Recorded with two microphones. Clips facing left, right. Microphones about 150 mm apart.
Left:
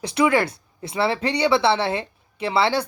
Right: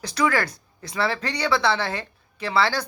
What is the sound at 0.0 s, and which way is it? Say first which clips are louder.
Speech: left 4 dB; 25° left (ahead or behind).